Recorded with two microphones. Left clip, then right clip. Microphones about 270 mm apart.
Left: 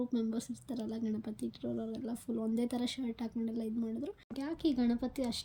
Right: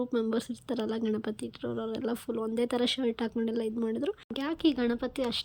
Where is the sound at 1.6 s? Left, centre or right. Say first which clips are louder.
Right 9 dB; right.